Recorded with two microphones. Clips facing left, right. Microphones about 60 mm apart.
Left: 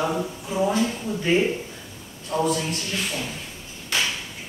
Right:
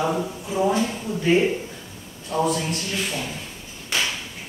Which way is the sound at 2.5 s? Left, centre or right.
Centre.